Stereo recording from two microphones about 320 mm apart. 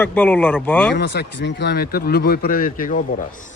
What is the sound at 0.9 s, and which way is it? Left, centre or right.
Speech, left.